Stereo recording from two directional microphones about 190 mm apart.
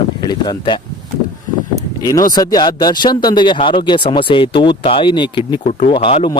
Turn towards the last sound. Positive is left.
turn(degrees=25)  # may be behind; listen again after turning